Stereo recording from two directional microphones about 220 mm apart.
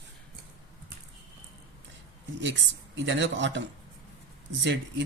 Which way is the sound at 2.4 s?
55° right (ahead or behind).